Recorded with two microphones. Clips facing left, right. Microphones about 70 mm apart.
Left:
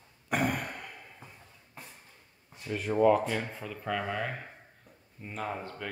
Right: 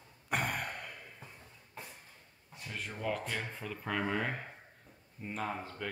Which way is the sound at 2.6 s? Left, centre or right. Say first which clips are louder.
Left 14 dB; centre.